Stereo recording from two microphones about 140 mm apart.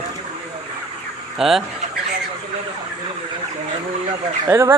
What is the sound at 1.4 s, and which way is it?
Speech, 5° right (ahead or behind).